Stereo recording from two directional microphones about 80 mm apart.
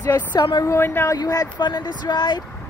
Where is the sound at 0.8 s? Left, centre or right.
Left.